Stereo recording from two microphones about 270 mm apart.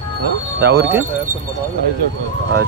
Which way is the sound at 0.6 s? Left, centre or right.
Right.